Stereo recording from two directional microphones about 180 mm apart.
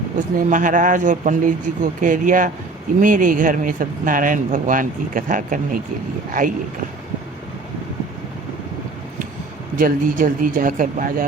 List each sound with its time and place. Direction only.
0.2 s speech: 45° right (ahead or behind)
9.7 s speech: 50° right (ahead or behind)